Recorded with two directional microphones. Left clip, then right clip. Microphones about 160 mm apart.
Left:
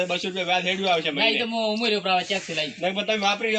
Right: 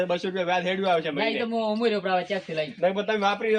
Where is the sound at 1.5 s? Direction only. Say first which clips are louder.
Left 1 dB; 25° right (ahead or behind).